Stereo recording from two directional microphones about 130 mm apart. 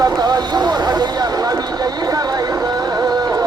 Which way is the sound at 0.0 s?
30° right (ahead or behind).